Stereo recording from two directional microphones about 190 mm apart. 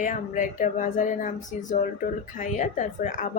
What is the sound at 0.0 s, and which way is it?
A woman's voice, 45° left (ahead or behind).